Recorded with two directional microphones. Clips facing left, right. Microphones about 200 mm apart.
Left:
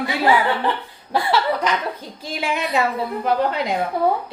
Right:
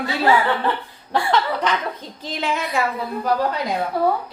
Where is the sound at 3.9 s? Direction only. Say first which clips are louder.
Even; 20° left (ahead or behind).